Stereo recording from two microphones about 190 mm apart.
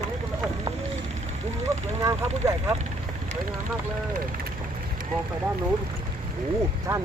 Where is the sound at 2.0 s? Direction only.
15° right (ahead or behind).